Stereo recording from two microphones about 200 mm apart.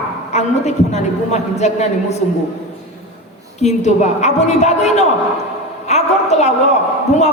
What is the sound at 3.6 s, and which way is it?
A woman's voice, 35° left (ahead or behind).